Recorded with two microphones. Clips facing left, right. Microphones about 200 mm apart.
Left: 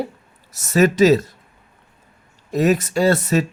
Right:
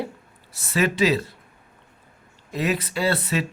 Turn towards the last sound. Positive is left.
turn(degrees=45)  # may be behind; listen again after turning